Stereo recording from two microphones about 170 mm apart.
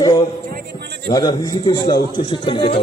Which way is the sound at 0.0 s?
20° left (ahead or behind).